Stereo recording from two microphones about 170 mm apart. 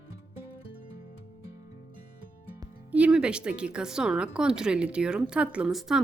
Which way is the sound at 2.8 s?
10° right (ahead or behind).